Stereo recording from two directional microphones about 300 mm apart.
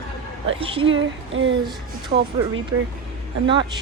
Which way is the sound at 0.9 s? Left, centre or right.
Right.